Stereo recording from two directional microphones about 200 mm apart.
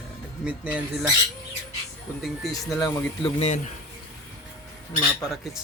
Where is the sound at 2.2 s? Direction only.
Centre (ahead or behind).